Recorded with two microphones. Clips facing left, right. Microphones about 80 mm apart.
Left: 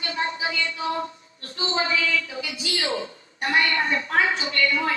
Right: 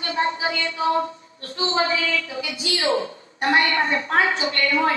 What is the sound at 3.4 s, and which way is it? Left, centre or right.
Speech, right.